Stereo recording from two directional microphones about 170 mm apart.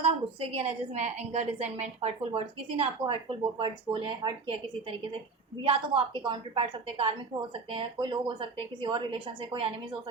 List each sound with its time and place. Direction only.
0.0 s a woman's voice: 35° right (ahead or behind)